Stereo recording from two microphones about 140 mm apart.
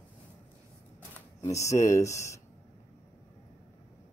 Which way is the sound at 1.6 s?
20° left (ahead or behind).